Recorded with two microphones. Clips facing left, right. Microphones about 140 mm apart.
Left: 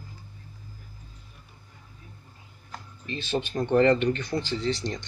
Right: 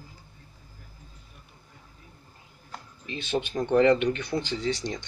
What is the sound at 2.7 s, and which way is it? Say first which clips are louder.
Speech: left 2 dB; 10° right (ahead or behind).